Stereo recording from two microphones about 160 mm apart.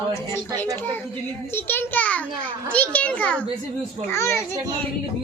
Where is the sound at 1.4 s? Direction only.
15° left (ahead or behind).